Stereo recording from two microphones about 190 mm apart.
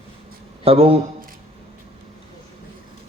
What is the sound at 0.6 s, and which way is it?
Speech, 30° right (ahead or behind).